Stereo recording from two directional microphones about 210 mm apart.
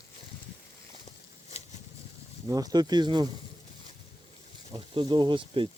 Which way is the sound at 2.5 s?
15° right (ahead or behind).